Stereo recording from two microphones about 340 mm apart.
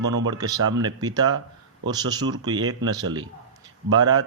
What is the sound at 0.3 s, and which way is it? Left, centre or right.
Speech, centre.